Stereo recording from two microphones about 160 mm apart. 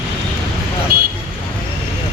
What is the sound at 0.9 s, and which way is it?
Vehicle, 65° right (ahead or behind).